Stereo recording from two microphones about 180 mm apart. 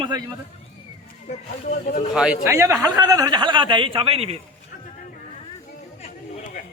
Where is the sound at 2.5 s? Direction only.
15° right (ahead or behind); by 4.4 s 35° right (ahead or behind).